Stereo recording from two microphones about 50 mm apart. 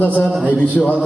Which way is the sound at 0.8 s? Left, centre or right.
Centre.